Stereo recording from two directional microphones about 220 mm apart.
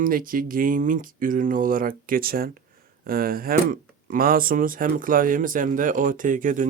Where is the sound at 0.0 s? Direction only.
40° right (ahead or behind).